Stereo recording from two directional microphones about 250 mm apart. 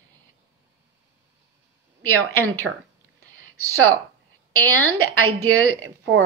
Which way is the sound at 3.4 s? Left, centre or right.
Right.